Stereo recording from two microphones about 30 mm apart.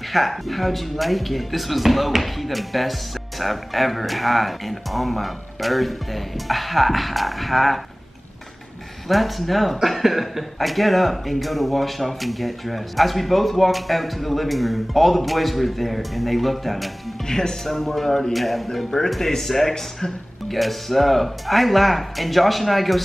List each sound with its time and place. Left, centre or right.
0.1 s speech: centre
9.1 s speech: centre
17.3 s speech: centre
17.6 s speech: centre